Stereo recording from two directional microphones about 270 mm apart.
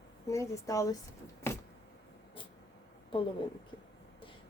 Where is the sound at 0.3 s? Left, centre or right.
Centre.